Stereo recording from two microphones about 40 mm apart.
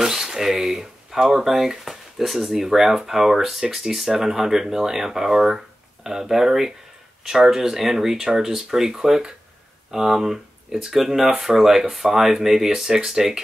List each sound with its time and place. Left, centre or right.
0.0 s speech: centre